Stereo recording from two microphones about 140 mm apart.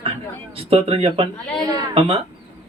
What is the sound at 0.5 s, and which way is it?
Speech, 45° right (ahead or behind).